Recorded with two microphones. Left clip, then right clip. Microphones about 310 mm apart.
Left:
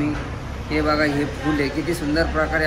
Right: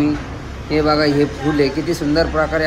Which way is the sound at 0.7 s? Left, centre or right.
Right.